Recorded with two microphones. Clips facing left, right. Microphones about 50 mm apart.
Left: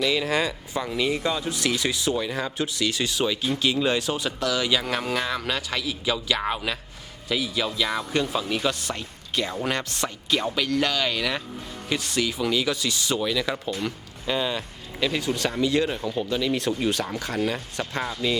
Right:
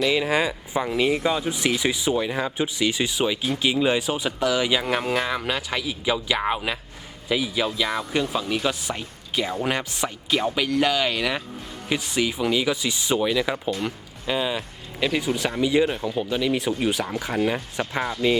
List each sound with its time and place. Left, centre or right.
0.0 s speech: centre